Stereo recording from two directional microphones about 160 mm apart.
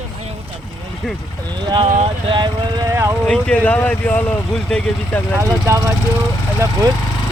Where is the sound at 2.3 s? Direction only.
30° right (ahead or behind).